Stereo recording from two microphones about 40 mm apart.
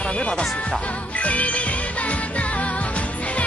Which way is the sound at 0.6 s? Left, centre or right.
Left.